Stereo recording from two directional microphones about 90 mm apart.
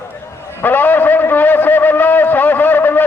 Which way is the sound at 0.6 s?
20° left (ahead or behind).